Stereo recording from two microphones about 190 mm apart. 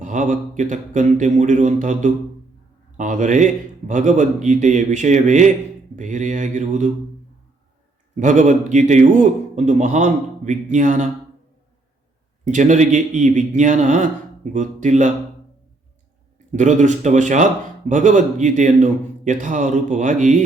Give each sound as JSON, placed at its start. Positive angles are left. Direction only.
{"t": 0.0, "sound": "speech", "side_deg": -40}
{"t": 8.1, "sound": "speech", "side_deg": -40}
{"t": 12.5, "sound": "speech", "side_deg": -40}
{"t": 16.5, "sound": "speech", "side_deg": -40}